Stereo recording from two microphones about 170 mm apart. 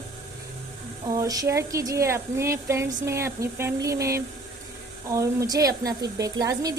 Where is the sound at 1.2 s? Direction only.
20° right (ahead or behind).